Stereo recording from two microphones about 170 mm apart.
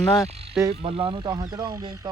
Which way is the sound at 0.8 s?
30° right (ahead or behind).